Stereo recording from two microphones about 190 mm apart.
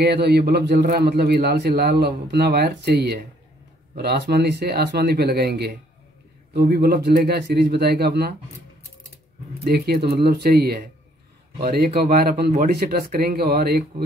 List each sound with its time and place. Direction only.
0.0 s a man's voice: 60° right (ahead or behind)
9.7 s a man's voice: 55° right (ahead or behind)